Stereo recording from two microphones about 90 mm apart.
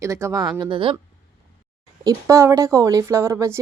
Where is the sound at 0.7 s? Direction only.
75° right (ahead or behind).